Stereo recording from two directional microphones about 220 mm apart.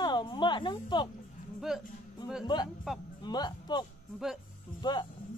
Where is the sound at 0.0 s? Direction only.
20° left (ahead or behind).